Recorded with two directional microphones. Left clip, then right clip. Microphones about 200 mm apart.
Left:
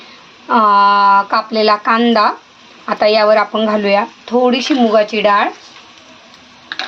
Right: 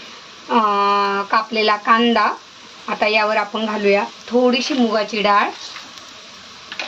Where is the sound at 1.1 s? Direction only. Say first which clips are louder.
Left 6 dB; 15° left (ahead or behind).